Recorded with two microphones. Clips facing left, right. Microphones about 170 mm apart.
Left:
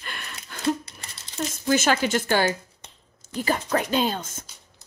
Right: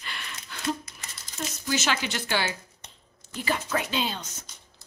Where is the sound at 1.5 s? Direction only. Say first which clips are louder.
Left 7 dB; 50° left (ahead or behind).